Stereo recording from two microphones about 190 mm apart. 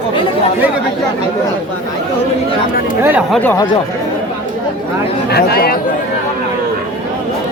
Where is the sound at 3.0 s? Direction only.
10° right (ahead or behind).